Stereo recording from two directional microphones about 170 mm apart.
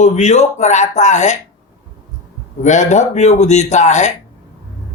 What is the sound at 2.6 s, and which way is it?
Speech, 45° left (ahead or behind).